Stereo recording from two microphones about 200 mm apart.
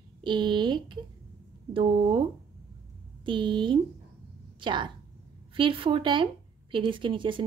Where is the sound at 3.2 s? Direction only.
25° right (ahead or behind).